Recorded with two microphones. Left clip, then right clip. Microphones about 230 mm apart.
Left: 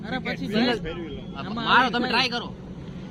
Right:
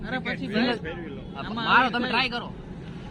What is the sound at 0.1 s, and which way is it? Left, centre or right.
Speech, left.